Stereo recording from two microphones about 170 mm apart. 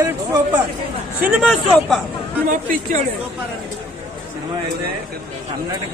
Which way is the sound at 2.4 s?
50° right (ahead or behind).